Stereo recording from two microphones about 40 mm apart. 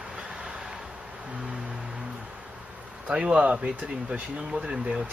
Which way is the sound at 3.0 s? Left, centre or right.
Right.